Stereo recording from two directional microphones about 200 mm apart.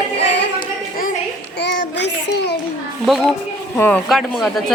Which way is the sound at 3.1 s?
Centre (ahead or behind).